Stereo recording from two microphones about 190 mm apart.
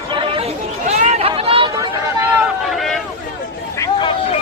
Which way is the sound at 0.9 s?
35° right (ahead or behind).